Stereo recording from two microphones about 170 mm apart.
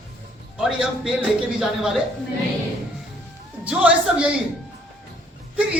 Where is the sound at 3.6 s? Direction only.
5° right (ahead or behind).